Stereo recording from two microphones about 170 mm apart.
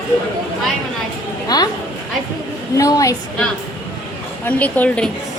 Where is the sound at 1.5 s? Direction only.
25° left (ahead or behind).